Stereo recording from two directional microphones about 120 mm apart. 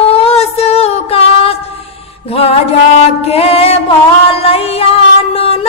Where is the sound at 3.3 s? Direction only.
55° left (ahead or behind).